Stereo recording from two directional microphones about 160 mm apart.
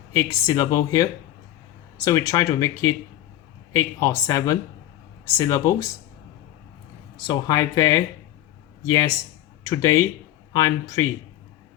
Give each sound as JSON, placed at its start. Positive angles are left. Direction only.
{"t": 0.1, "sound": "speech", "side_deg": 20}
{"t": 7.2, "sound": "speech", "side_deg": 25}